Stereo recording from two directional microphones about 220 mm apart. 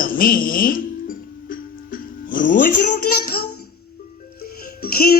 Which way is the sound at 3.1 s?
40° left (ahead or behind).